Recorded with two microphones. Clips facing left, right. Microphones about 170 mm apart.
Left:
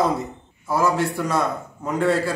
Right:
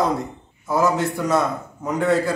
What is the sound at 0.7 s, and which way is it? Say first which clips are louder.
A man's voice: right 1 dB; 20° right (ahead or behind).